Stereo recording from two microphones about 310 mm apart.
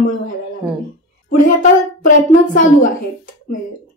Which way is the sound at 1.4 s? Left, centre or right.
Left.